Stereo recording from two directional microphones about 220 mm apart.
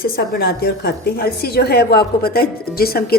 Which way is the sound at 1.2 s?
45° left (ahead or behind).